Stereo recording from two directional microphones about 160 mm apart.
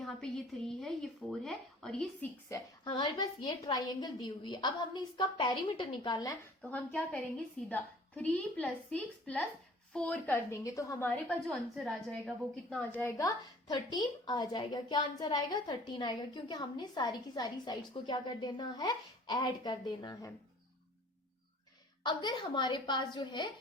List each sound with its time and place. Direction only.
0.0 s speech: 5° left (ahead or behind)
2.5 s a woman's voice: 30° left (ahead or behind)
6.6 s a woman's voice: 10° left (ahead or behind)
11.3 s speech: centre (ahead or behind)
12.7 s a woman's voice: 10° left (ahead or behind)
22.0 s a woman's voice: 30° left (ahead or behind)